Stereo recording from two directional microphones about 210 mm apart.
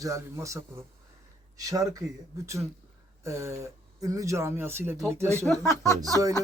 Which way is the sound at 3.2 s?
15° right (ahead or behind).